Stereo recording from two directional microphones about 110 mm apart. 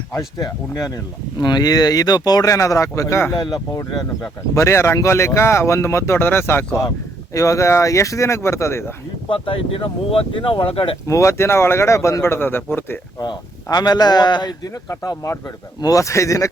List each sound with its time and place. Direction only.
0.3 s a man's voice: 35° left (ahead or behind)
3.3 s speech: 45° left (ahead or behind)
3.7 s a man's voice: 30° left (ahead or behind)
9.3 s speech: 55° left (ahead or behind)
11.1 s speech: 25° left (ahead or behind)
13.1 s a man's voice: 35° left (ahead or behind)